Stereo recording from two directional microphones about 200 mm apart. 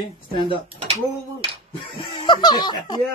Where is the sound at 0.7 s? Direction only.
30° right (ahead or behind).